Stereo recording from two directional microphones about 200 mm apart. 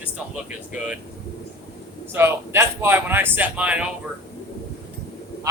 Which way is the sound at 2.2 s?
10° right (ahead or behind).